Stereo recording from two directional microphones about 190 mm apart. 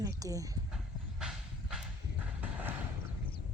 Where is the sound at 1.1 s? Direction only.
5° right (ahead or behind).